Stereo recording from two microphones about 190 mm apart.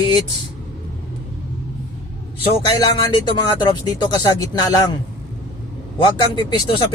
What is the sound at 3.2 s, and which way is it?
Speech, 20° left (ahead or behind).